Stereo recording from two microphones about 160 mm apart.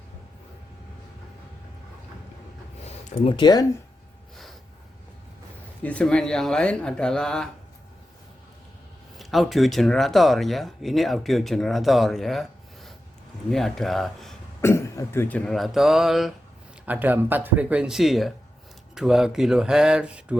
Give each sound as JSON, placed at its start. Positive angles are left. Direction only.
{"t": 2.8, "sound": "speech", "side_deg": 35}
{"t": 5.8, "sound": "speech", "side_deg": 10}
{"t": 9.1, "sound": "speech", "side_deg": 0}
{"t": 14.6, "sound": "speech", "side_deg": 15}